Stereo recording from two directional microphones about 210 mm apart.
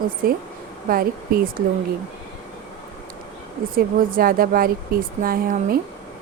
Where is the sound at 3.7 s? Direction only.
45° right (ahead or behind).